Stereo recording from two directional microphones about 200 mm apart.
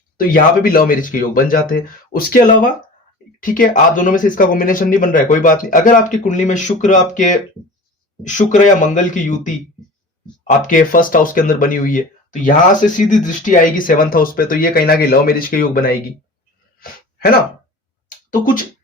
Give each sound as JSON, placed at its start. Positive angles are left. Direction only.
{"t": 0.2, "sound": "speech", "side_deg": 45}